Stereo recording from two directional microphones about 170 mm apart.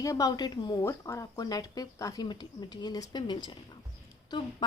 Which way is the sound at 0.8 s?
15° left (ahead or behind).